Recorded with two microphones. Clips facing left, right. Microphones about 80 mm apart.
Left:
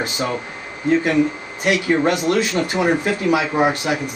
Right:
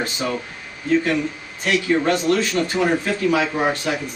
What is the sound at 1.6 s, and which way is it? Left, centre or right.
Speech, centre.